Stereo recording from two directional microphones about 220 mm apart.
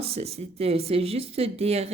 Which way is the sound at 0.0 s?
25° right (ahead or behind).